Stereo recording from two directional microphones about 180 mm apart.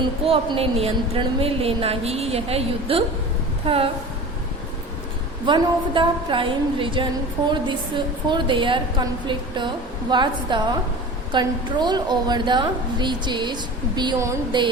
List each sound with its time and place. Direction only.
0.0 s a woman's voice: 30° right (ahead or behind)
5.5 s a woman's voice: 25° right (ahead or behind)